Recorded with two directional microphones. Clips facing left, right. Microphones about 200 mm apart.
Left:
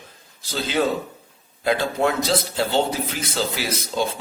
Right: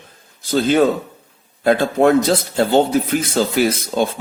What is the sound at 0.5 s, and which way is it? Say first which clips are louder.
A man's voice: right 8 dB; 50° right (ahead or behind).